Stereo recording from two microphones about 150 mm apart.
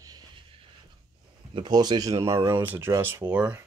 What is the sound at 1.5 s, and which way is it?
Speech, 30° right (ahead or behind).